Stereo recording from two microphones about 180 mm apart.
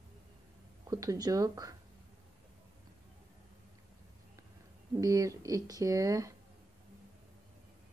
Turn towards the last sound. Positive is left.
turn(degrees=-20)  # may be behind; listen again after turning